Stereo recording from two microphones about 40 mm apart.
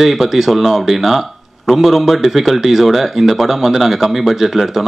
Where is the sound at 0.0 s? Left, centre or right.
Centre.